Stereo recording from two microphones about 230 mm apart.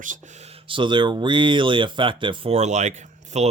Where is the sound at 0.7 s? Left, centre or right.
Right.